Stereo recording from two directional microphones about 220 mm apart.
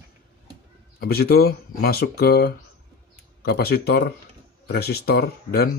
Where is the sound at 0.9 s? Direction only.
45° left (ahead or behind).